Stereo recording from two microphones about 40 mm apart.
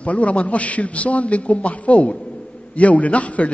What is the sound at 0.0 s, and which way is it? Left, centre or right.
A man's voice, left.